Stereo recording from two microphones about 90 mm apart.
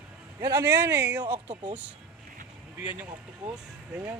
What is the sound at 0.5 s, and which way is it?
Speech, 30° right (ahead or behind).